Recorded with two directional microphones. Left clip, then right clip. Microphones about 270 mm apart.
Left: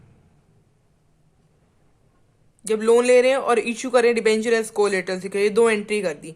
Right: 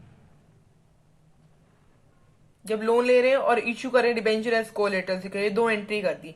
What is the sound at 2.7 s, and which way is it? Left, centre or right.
A woman's voice, left.